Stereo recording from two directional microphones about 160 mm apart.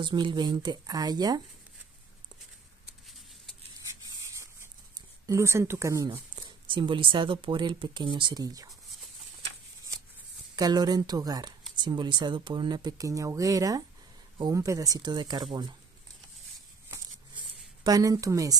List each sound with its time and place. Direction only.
0.0 s speech: 30° right (ahead or behind)
4.9 s speech: 20° right (ahead or behind)
6.3 s speech: 30° right (ahead or behind)
10.5 s speech: 25° right (ahead or behind)
17.4 s a sound: 25° right (ahead or behind)